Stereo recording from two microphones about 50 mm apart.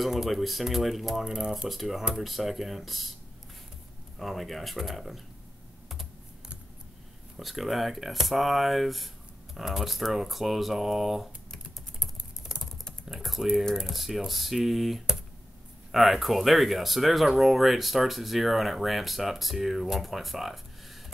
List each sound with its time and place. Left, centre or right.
0.0 s speech: centre
4.2 s speech: centre
7.3 s speech: centre
12.5 s typing: centre
13.1 s speech: centre